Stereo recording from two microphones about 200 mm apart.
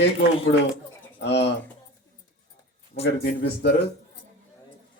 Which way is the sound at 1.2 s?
60° left (ahead or behind).